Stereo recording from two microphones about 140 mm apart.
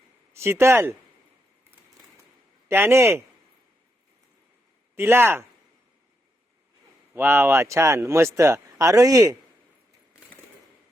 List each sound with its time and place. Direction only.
0.3 s speech: 20° right (ahead or behind)
2.6 s a man's voice: 15° right (ahead or behind)
4.9 s a man's voice: 15° right (ahead or behind)
7.1 s speech: 15° right (ahead or behind)